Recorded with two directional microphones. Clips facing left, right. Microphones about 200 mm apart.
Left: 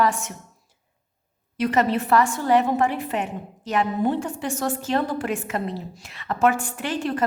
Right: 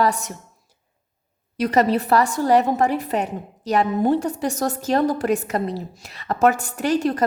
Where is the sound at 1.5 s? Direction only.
40° right (ahead or behind).